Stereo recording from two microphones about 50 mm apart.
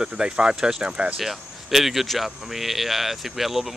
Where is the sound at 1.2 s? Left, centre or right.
Centre.